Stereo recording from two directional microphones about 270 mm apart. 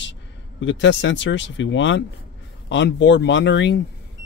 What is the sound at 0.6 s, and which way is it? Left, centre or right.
Speech, left.